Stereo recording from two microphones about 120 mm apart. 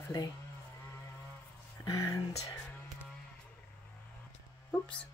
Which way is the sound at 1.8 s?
25° left (ahead or behind).